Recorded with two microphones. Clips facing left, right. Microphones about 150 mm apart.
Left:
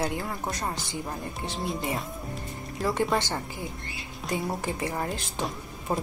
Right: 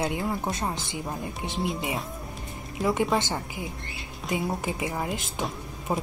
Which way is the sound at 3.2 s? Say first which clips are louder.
Right 1 dB; 20° right (ahead or behind).